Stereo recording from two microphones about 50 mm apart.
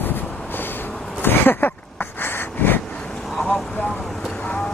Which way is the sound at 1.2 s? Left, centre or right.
Left.